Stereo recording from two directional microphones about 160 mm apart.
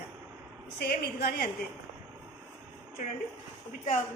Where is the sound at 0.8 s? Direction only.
85° left.